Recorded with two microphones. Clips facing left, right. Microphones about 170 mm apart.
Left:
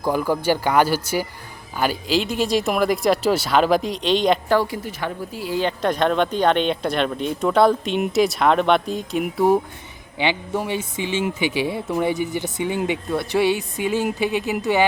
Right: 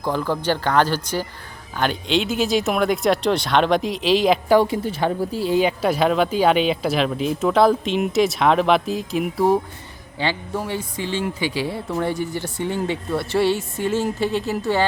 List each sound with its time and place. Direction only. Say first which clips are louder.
0.0 s speech: left 2 dB; 10° left (ahead or behind)
4.5 s a woman's voice: right 4 dB; 25° right (ahead or behind)
5.5 s speech: right 1 dB; 10° right (ahead or behind)
10.2 s speech: left 2 dB; 20° left (ahead or behind)